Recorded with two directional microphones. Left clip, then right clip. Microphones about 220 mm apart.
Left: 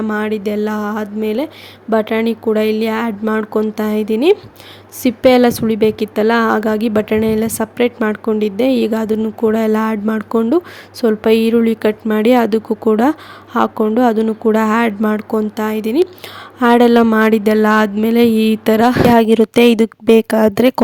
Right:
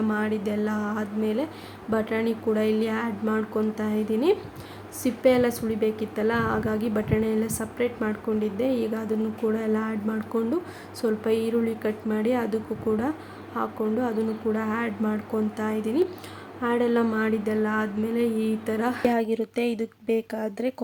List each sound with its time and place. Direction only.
0.1 s a woman's voice: 40° left (ahead or behind)